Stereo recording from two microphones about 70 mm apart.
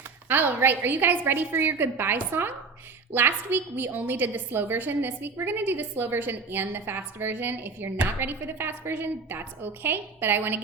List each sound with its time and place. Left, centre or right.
0.3 s a woman's voice: right